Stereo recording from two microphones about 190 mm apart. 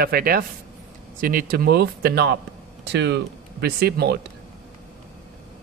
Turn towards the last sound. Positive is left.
turn(degrees=-60)  # may be behind; listen again after turning